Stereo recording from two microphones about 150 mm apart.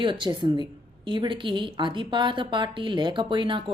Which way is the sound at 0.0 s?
30° right (ahead or behind).